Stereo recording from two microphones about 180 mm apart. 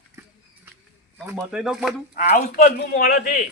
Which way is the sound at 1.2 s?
15° right (ahead or behind).